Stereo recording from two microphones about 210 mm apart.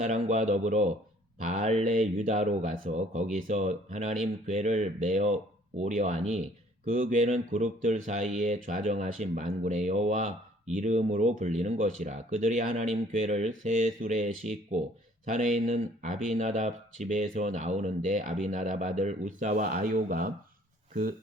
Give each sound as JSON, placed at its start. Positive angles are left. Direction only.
{"t": 0.0, "sound": "speech", "side_deg": -35}
{"t": 15.4, "sound": "speech", "side_deg": -35}